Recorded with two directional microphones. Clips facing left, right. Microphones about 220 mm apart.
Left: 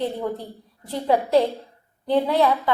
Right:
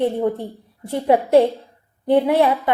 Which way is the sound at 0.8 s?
25° right (ahead or behind).